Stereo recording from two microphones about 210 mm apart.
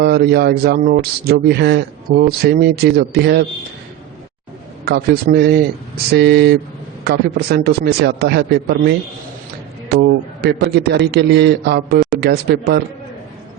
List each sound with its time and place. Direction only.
0.0 s speech: 50° right (ahead or behind)
4.9 s speech: 50° right (ahead or behind)